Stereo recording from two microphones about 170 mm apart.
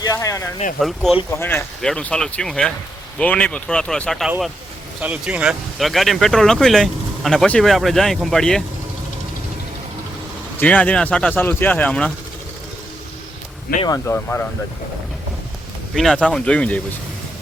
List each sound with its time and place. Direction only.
0.2 s speech: 20° left (ahead or behind)
0.8 s speech: centre (ahead or behind)
1.3 s speech: 15° left (ahead or behind)
10.6 s speech: 10° left (ahead or behind)
13.8 s speech: 20° left (ahead or behind)
16.0 s speech: 5° left (ahead or behind)